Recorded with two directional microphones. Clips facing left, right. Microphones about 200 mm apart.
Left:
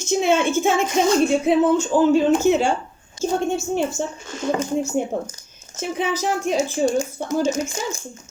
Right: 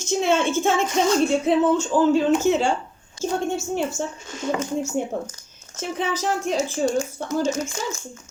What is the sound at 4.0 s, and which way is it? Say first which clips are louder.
A woman's voice: left 2 dB; 20° left (ahead or behind).